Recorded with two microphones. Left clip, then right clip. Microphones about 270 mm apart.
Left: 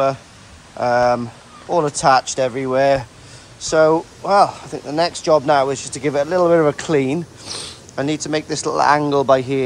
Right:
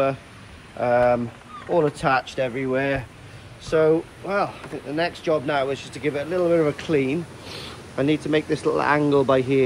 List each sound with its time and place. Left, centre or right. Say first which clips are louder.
0.7 s speech: left 3 dB; centre